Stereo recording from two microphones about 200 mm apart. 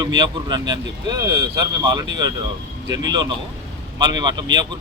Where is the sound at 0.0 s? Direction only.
20° right (ahead or behind).